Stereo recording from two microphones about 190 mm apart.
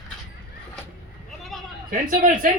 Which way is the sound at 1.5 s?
Centre (ahead or behind).